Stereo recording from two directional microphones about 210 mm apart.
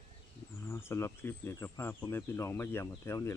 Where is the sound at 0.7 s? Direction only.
10° left (ahead or behind).